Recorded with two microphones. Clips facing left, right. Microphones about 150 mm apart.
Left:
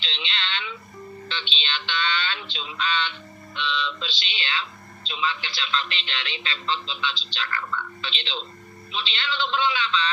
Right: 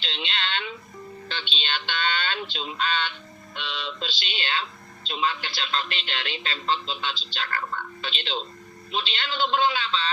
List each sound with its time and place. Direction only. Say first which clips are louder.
0.0 s fire alarm: right 2 dB; 45° right (ahead or behind)
1.3 s speech: right 1 dB; 45° right (ahead or behind)